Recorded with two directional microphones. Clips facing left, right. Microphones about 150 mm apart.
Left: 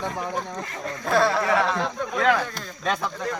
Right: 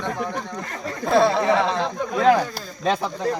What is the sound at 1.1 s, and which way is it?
Speech, 25° right (ahead or behind).